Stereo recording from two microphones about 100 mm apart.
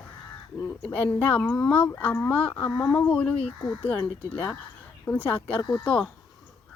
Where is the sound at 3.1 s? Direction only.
15° left (ahead or behind).